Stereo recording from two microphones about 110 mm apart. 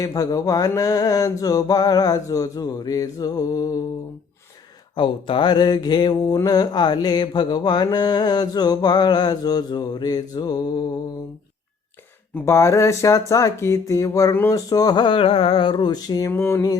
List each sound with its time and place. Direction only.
0.0 s mantra: 30° left (ahead or behind)
4.9 s speech: 50° left (ahead or behind)
6.4 s mantra: 40° left (ahead or behind)
12.5 s speech: 25° left (ahead or behind)
16.3 s speech: 25° left (ahead or behind)